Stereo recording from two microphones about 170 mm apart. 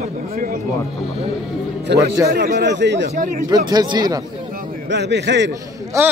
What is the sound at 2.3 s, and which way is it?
Speech, 65° right (ahead or behind).